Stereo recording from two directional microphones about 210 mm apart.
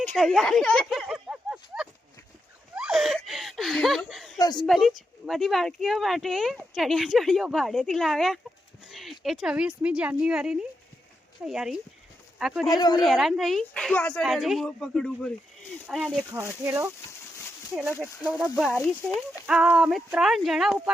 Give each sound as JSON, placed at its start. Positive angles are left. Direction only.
{"t": 0.0, "sound": "a sound", "side_deg": 5}
{"t": 2.7, "sound": "laughter", "side_deg": 0}
{"t": 4.4, "sound": "speech", "side_deg": 20}
{"t": 4.6, "sound": "speech", "side_deg": 0}
{"t": 12.6, "sound": "speech", "side_deg": 20}
{"t": 13.1, "sound": "speech", "side_deg": 0}
{"t": 18.0, "sound": "speech", "side_deg": -5}
{"t": 19.5, "sound": "speech", "side_deg": -5}